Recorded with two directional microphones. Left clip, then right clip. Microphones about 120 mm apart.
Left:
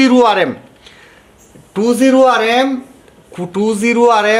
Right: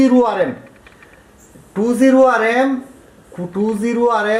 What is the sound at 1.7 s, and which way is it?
Speech, 35° left (ahead or behind).